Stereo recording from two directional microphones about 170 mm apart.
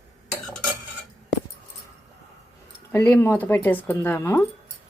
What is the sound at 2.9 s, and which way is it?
Speech, 15° left (ahead or behind).